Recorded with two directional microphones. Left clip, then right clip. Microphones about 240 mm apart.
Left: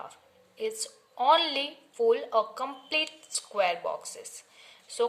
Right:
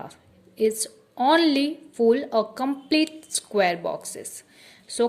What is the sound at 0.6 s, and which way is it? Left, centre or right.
A woman's voice, right.